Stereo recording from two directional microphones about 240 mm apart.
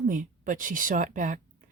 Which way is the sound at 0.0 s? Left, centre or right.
Right.